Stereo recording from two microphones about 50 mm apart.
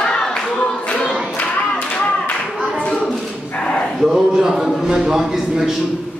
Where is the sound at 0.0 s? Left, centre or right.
Centre.